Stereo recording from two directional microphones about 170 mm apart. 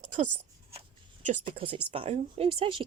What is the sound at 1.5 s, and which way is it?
Speech, 30° right (ahead or behind).